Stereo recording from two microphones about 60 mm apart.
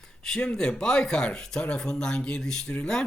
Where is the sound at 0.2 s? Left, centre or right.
Centre.